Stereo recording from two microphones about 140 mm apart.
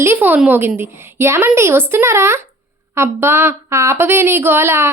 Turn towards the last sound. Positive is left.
turn(degrees=-20)  # may be behind; listen again after turning